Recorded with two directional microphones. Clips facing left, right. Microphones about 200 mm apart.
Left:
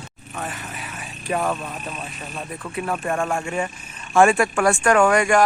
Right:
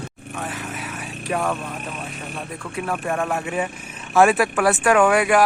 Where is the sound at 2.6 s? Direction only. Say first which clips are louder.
Left 1 dB; centre (ahead or behind).